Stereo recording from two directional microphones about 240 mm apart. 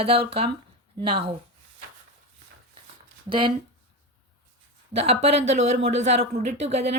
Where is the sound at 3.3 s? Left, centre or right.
Centre.